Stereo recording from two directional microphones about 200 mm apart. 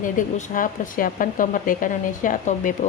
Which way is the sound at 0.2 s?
40° left (ahead or behind).